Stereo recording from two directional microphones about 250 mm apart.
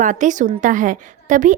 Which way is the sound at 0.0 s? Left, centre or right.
Right.